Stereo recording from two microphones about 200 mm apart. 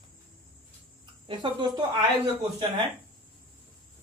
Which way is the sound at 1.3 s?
25° right (ahead or behind).